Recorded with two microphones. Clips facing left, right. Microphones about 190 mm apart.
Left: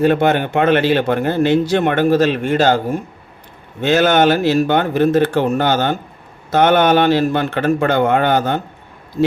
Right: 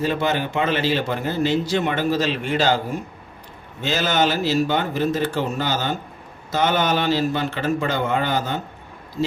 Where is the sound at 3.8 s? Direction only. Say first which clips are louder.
Left 8 dB; 60° left (ahead or behind).